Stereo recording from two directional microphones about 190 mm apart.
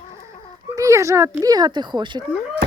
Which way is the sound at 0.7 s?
15° right (ahead or behind).